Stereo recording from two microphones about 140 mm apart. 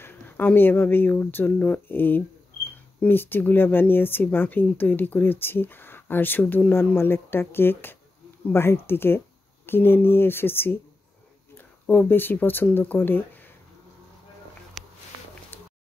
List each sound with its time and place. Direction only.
0.0 s speech: 15° left (ahead or behind)
11.9 s speech: 15° left (ahead or behind)
15.5 s a sound: 15° left (ahead or behind)